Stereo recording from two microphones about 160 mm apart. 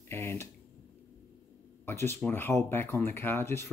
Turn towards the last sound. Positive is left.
turn(degrees=15)  # may be behind; listen again after turning